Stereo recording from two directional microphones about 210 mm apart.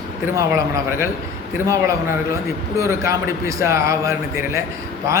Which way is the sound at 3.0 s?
15° right (ahead or behind).